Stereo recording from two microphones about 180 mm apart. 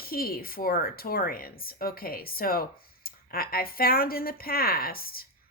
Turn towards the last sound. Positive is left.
turn(degrees=55)  # may be behind; listen again after turning